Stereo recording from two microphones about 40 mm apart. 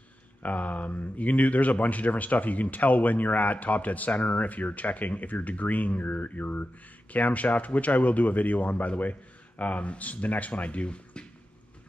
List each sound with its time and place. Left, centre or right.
0.4 s speech: left